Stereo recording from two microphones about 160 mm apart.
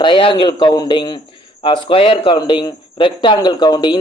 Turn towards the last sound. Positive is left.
turn(degrees=25)  # may be behind; listen again after turning